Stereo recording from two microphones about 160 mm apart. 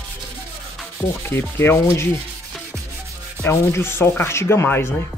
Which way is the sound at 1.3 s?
15° left (ahead or behind).